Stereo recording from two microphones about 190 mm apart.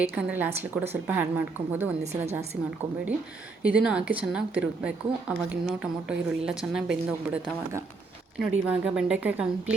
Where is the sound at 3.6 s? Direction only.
5° right (ahead or behind).